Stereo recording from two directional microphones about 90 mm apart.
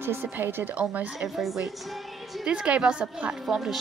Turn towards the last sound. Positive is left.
turn(degrees=0)  # may be behind; listen again after turning